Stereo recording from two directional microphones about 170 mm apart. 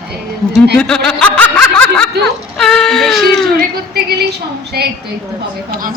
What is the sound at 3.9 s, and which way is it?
A woman's voice, 70° right (ahead or behind).